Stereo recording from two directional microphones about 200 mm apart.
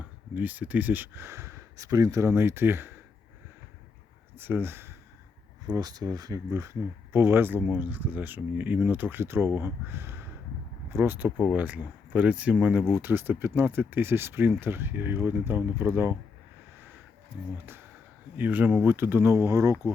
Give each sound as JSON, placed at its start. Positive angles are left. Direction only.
{"t": 0.3, "sound": "speech", "side_deg": -10}
{"t": 4.4, "sound": "speech", "side_deg": -10}
{"t": 18.3, "sound": "speech", "side_deg": -10}